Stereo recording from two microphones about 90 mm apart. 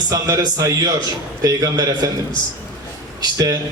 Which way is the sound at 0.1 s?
40° right (ahead or behind).